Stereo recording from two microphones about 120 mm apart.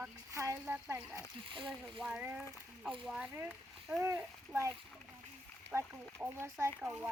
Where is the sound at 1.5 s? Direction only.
45° right (ahead or behind).